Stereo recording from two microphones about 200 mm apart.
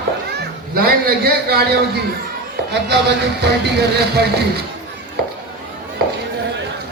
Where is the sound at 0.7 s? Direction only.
50° right (ahead or behind).